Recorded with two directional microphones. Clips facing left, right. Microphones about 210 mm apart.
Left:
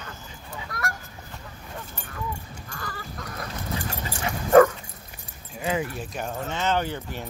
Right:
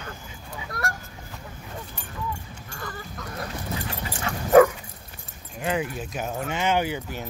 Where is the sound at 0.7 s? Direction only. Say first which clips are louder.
Right 2 dB; 30° right (ahead or behind).